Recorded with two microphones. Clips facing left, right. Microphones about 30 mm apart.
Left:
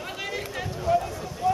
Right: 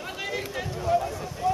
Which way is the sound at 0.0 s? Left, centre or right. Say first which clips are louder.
Even; centre.